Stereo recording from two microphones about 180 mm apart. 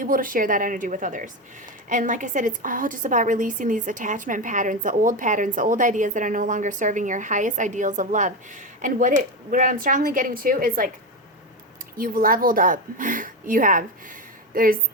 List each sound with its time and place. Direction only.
0.0 s a woman's voice: 50° right (ahead or behind)
11.9 s a woman's voice: 50° right (ahead or behind)